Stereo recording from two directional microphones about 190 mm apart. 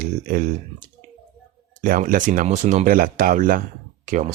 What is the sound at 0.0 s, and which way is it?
Speech, 45° right (ahead or behind).